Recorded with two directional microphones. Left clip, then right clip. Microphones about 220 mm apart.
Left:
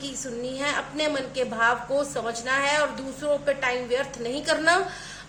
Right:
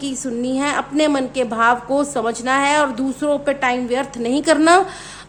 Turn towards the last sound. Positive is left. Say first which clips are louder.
# right 9 dB
turn(degrees=-50)  # may be behind; listen again after turning